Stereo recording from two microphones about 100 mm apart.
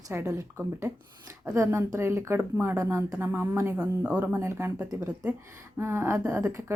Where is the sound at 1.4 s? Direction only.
30° right (ahead or behind).